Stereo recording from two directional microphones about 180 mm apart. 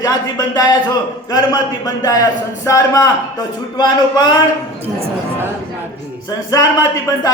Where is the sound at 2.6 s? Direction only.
15° left (ahead or behind).